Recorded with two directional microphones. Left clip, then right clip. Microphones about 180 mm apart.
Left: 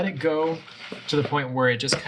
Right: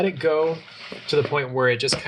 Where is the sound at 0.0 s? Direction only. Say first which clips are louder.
Right 3 dB; 25° right (ahead or behind).